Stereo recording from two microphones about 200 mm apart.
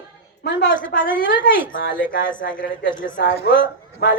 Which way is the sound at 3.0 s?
50° left (ahead or behind).